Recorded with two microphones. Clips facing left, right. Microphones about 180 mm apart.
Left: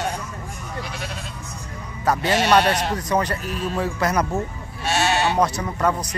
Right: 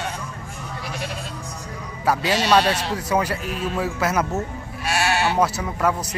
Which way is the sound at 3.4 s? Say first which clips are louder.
Even; 45° left (ahead or behind).